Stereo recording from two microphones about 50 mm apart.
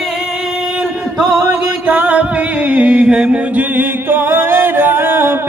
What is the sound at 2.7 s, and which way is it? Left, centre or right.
Mantra, right.